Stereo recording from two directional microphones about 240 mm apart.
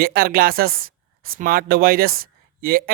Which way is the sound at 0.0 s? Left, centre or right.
Right.